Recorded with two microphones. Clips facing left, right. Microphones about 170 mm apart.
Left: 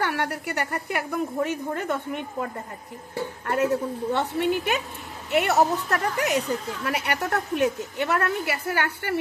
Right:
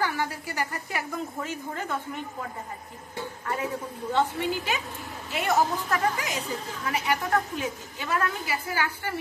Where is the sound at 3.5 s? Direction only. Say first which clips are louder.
Left 8 dB; 70° left (ahead or behind).